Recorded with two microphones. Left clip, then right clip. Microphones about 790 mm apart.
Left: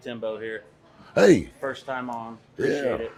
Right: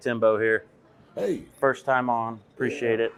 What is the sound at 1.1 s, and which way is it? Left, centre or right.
Speech, left.